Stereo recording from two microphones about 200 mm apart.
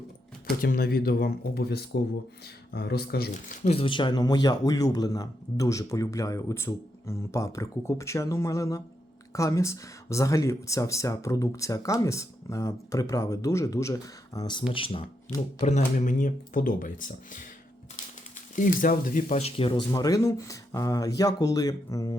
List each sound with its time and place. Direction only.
0.4 s speech: 50° left (ahead or behind)
18.5 s speech: 45° left (ahead or behind); by 22.1 s 15° left (ahead or behind)